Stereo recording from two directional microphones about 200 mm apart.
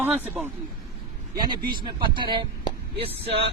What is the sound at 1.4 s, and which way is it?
A man's voice, 20° right (ahead or behind).